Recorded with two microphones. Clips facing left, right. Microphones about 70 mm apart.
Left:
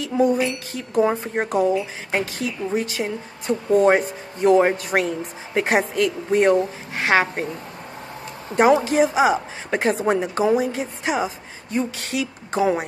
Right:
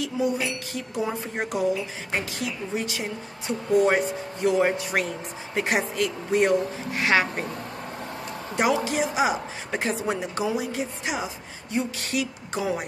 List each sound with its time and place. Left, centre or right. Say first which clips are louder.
0.7 s speech: left 10 dB; left
8.5 s speech: left 8 dB; left
9.7 s speech: left 7 dB; left